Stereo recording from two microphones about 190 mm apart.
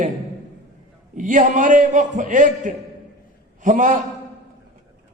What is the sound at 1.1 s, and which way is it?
A man's voice, 40° right (ahead or behind).